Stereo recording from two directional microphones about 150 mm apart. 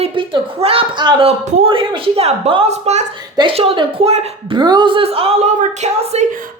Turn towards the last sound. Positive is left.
turn(degrees=-45)  # may be behind; listen again after turning